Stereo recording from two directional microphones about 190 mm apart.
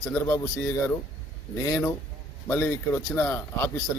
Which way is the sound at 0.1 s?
15° left (ahead or behind).